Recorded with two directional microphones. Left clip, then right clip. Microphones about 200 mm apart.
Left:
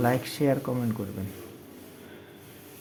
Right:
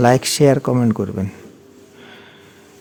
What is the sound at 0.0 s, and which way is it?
Speech, 60° right (ahead or behind).